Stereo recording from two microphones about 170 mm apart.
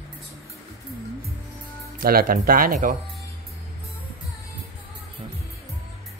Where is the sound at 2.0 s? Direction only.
60° right (ahead or behind).